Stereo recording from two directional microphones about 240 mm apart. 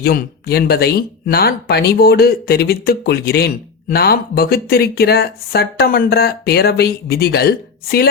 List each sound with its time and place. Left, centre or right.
0.0 s speech: left